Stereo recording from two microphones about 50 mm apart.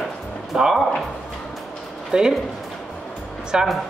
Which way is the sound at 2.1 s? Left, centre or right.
Centre.